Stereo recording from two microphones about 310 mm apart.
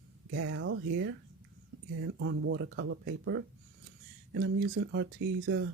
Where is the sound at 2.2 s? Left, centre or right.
Right.